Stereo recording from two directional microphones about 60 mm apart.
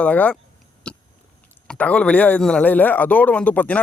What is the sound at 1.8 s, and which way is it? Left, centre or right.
Speech, left.